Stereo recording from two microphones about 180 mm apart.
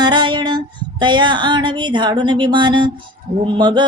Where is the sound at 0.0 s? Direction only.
25° right (ahead or behind).